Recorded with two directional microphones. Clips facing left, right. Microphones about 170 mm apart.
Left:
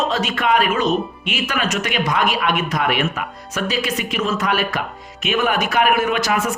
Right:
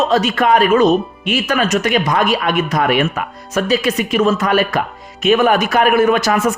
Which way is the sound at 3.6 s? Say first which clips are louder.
Right 6 dB; 40° right (ahead or behind).